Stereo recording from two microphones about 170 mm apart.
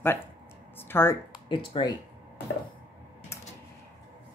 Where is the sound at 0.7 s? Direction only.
15° left (ahead or behind).